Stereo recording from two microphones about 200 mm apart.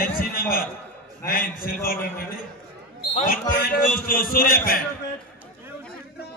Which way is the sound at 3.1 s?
45° left (ahead or behind).